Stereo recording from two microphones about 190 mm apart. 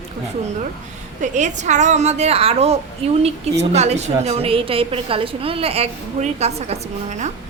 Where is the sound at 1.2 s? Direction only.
40° right (ahead or behind).